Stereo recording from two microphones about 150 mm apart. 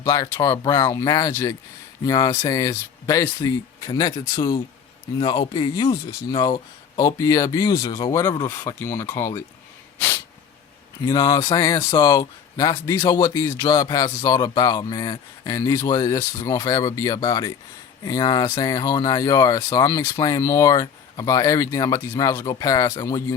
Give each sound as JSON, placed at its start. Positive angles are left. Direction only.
{"t": 0.0, "sound": "speech", "side_deg": 25}
{"t": 11.0, "sound": "speech", "side_deg": 25}